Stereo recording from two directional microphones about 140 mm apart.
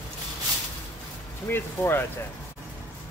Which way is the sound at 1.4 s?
15° left (ahead or behind).